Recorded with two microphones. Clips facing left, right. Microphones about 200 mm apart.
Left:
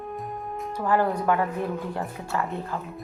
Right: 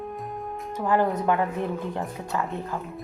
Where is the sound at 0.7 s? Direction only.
20° right (ahead or behind).